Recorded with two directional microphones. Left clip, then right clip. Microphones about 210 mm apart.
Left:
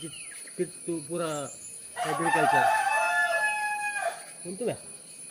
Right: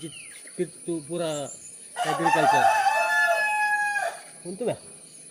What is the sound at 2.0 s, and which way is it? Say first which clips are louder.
Chicken: right 3 dB; 50° right (ahead or behind).